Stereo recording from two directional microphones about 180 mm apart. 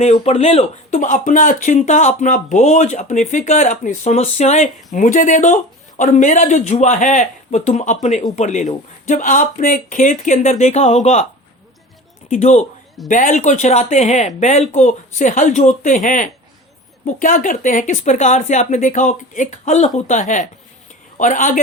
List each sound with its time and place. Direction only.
0.0 s speech: 40° left (ahead or behind)
12.3 s speech: 40° left (ahead or behind)